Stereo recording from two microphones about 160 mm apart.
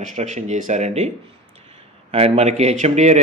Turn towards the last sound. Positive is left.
turn(degrees=-45)  # may be behind; listen again after turning